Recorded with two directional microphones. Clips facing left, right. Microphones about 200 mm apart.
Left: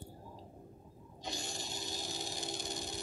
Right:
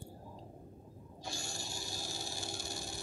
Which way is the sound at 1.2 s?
20° left (ahead or behind).